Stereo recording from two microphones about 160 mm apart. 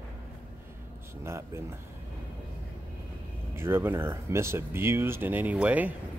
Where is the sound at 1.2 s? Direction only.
15° right (ahead or behind).